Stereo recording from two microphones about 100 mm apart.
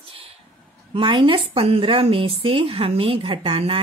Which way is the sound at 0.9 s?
55° right (ahead or behind).